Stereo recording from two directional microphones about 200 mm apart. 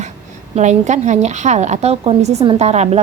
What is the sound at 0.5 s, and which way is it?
A woman's voice, 35° right (ahead or behind).